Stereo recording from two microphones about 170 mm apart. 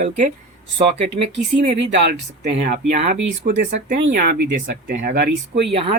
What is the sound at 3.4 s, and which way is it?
Speech, 80° right.